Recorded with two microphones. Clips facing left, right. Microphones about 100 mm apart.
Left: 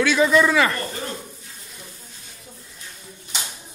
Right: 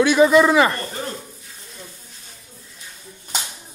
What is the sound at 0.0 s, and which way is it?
Speech, 20° right (ahead or behind).